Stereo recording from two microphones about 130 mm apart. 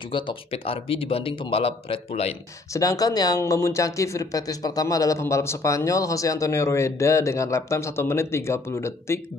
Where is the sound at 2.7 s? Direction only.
25° left (ahead or behind).